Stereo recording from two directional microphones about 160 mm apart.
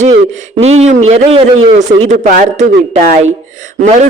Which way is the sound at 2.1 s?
50° right (ahead or behind).